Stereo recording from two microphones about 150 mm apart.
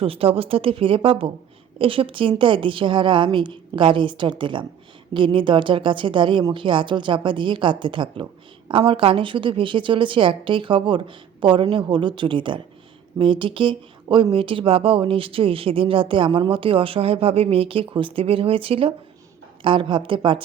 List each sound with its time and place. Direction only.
0.0 s a woman's voice: 40° right (ahead or behind)